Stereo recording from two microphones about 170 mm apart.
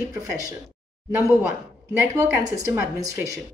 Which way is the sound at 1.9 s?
15° right (ahead or behind).